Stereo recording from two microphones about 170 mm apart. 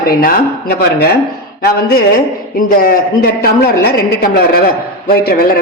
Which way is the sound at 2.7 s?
55° left (ahead or behind).